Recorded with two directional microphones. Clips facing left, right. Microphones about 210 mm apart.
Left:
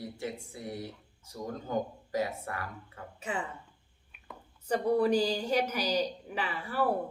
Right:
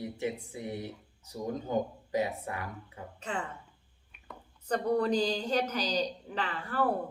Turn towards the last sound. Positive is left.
turn(degrees=10)  # may be behind; listen again after turning